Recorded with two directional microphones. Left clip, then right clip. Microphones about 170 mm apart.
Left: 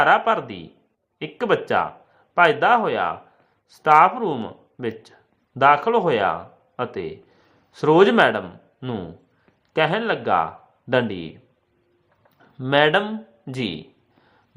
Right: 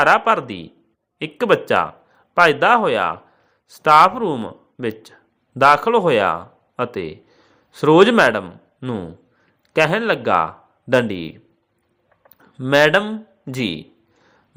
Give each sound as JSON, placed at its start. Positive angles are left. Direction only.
{"t": 0.0, "sound": "a man's voice", "side_deg": -20}
{"t": 8.4, "sound": "speech", "side_deg": -10}
{"t": 9.7, "sound": "speech", "side_deg": -20}
{"t": 12.4, "sound": "speech", "side_deg": -15}